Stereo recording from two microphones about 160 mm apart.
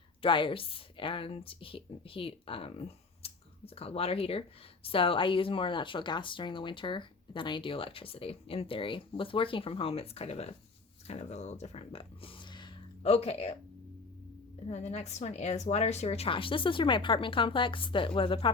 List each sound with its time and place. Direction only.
0.2 s a woman's voice: 30° left (ahead or behind)
14.7 s a woman's voice: 40° left (ahead or behind)